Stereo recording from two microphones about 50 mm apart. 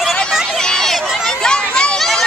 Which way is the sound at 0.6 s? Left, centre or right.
Centre.